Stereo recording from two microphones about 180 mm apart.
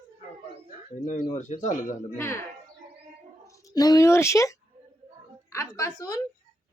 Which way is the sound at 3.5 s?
20° left (ahead or behind).